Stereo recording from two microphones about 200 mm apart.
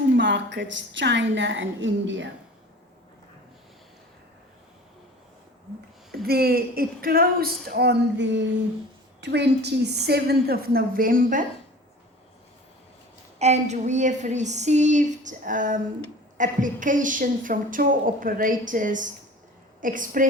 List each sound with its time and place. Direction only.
0.2 s a woman's voice: 60° right (ahead or behind)
6.2 s a woman's voice: 50° right (ahead or behind)
13.4 s a woman's voice: 35° right (ahead or behind)